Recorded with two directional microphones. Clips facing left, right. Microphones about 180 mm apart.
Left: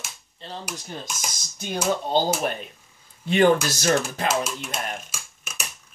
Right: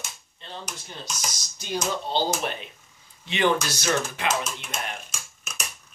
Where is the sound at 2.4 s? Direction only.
45° left (ahead or behind).